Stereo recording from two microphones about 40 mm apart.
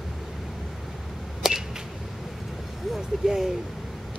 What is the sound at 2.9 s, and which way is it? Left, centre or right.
Speech, centre.